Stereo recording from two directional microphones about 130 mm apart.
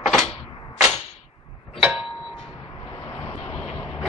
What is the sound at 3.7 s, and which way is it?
Vehicle, centre (ahead or behind).